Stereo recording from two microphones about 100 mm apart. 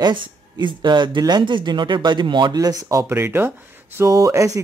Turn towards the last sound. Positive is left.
turn(degrees=-35)  # may be behind; listen again after turning